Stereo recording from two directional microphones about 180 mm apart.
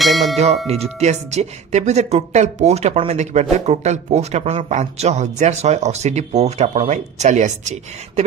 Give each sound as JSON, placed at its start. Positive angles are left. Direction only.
{"t": 0.0, "sound": "bell", "side_deg": 0}
{"t": 0.9, "sound": "speech", "side_deg": -40}